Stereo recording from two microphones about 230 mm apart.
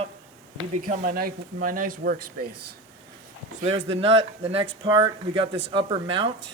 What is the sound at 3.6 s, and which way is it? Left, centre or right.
Speech, right.